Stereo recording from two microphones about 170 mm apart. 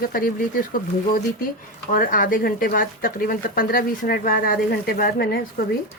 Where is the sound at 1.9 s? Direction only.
55° left (ahead or behind).